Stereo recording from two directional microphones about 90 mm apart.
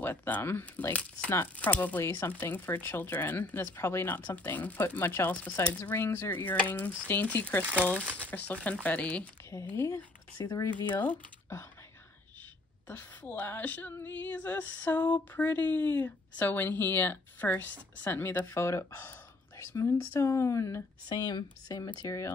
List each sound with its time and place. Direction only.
0.0 s female singing: 20° left (ahead or behind)
5.3 s speech: 15° left (ahead or behind)
5.8 s female singing: 25° left (ahead or behind)
8.3 s speech: 15° left (ahead or behind)
9.7 s female singing: 20° left (ahead or behind)
10.4 s speech: 40° left (ahead or behind)
10.9 s speech: 20° left (ahead or behind)
12.8 s female singing: 20° left (ahead or behind)
19.6 s speech: 35° left (ahead or behind)
21.1 s speech: 55° left (ahead or behind)
22.0 s speech: 35° left (ahead or behind)